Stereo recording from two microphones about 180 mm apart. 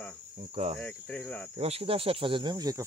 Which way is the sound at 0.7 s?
10° left (ahead or behind).